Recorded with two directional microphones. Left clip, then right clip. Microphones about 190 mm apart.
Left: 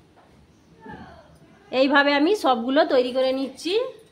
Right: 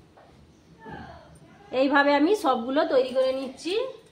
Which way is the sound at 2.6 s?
30° left (ahead or behind).